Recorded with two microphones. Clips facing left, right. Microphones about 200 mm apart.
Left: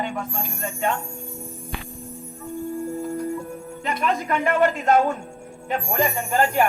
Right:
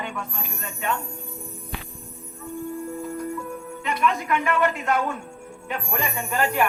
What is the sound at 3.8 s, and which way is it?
A woman's voice, 40° left (ahead or behind).